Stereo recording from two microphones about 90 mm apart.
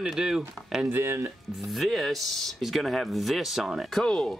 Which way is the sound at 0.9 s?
25° right (ahead or behind).